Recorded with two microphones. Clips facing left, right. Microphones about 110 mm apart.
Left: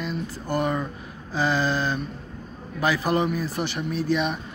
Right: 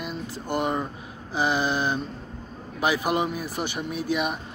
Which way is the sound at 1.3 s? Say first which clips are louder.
Left 1 dB; 20° right (ahead or behind).